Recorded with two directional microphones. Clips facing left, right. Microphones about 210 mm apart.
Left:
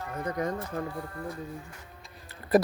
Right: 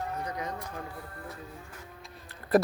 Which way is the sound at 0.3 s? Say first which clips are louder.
Left 6 dB; 50° left (ahead or behind).